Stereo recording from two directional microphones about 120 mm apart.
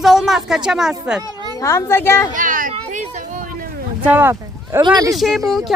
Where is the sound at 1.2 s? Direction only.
35° right (ahead or behind).